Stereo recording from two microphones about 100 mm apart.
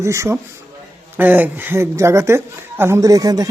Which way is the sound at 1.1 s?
20° right (ahead or behind).